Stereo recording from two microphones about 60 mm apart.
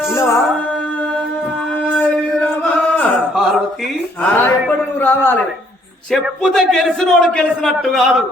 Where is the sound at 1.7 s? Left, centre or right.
Left.